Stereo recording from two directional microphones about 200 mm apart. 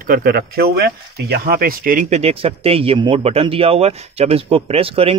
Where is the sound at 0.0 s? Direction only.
45° right (ahead or behind).